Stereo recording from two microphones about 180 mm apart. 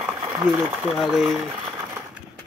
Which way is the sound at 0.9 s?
Centre (ahead or behind).